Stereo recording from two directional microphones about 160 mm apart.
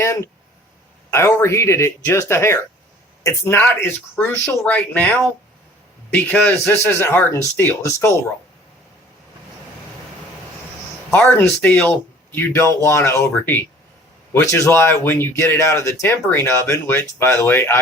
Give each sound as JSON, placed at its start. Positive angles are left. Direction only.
{"t": 0.0, "sound": "speech", "side_deg": 15}
{"t": 11.1, "sound": "speech", "side_deg": 15}